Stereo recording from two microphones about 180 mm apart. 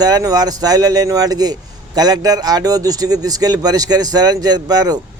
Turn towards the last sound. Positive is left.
turn(degrees=-20)  # may be behind; listen again after turning